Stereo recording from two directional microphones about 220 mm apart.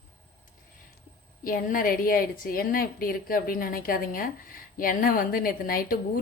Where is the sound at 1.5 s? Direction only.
40° left (ahead or behind).